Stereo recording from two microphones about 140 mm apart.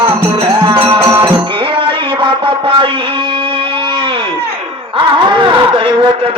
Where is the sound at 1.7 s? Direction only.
40° right (ahead or behind).